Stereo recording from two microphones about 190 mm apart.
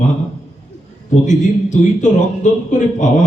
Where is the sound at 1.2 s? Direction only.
40° left (ahead or behind).